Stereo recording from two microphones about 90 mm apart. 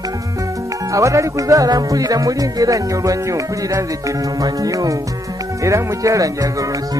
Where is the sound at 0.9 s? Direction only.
35° right (ahead or behind).